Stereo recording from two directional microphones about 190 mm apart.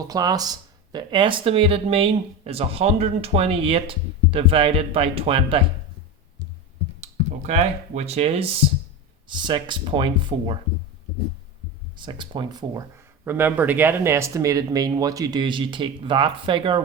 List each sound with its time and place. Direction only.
0.1 s speech: 20° right (ahead or behind)
7.0 s speech: 35° right (ahead or behind)
11.9 s speech: 25° right (ahead or behind)
13.2 s speech: 10° right (ahead or behind)